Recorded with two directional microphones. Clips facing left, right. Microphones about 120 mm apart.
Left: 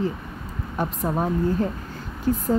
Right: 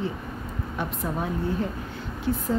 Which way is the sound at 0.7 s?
40° left (ahead or behind).